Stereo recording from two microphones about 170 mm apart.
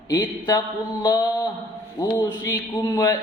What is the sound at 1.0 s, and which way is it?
Mantra, 25° left (ahead or behind).